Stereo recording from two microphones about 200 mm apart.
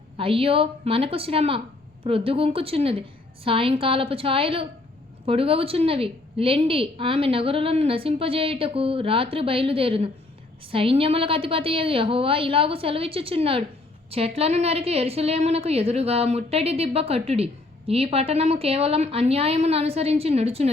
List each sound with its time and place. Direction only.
0.2 s a woman's voice: 25° right (ahead or behind)